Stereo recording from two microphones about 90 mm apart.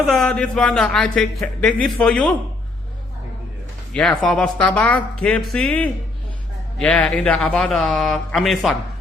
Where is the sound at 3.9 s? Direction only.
15° left (ahead or behind).